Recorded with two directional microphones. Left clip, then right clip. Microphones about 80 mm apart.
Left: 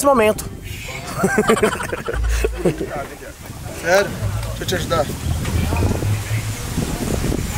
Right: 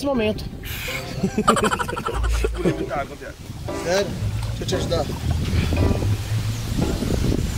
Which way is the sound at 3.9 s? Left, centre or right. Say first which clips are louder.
Left 7 dB; left.